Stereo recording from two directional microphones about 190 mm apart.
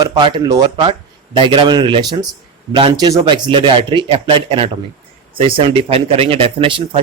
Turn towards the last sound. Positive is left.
turn(degrees=-25)  # may be behind; listen again after turning